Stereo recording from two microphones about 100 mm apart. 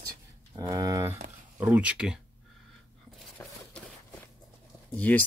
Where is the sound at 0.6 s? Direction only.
40° right (ahead or behind).